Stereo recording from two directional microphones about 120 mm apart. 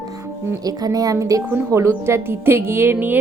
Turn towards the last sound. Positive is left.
turn(degrees=-15)  # may be behind; listen again after turning